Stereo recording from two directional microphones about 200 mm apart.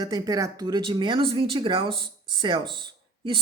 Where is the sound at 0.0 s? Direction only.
20° right (ahead or behind).